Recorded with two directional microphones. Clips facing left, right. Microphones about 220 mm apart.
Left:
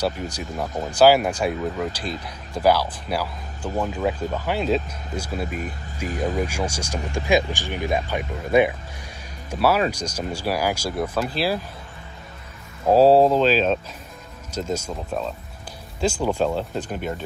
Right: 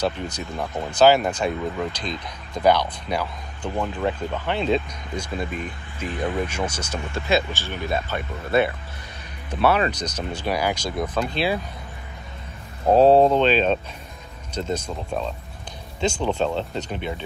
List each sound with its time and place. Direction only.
0.0 s speech: 10° left (ahead or behind)
5.5 s speech: 45° left (ahead or behind)
6.4 s speech: 10° left (ahead or behind)
12.9 s speech: 5° left (ahead or behind)